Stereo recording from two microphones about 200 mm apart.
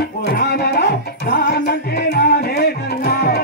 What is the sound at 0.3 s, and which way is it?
Music, 55° left (ahead or behind).